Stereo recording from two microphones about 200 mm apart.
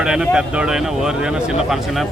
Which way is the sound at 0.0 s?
5° right (ahead or behind).